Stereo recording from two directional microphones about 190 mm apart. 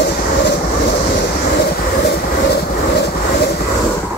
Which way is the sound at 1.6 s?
60° left (ahead or behind).